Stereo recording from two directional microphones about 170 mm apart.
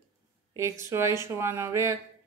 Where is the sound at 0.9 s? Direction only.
15° right (ahead or behind).